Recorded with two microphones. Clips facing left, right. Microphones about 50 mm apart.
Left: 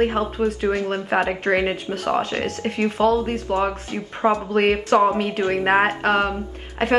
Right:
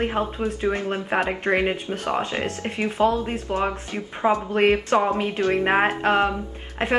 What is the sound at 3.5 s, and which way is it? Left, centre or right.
Speech, centre.